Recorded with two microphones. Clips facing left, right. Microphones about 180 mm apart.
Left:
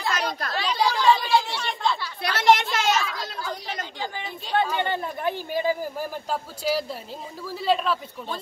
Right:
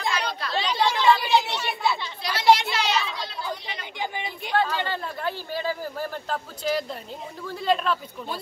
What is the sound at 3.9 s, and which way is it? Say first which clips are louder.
Chatter: right 1 dB; 15° right (ahead or behind).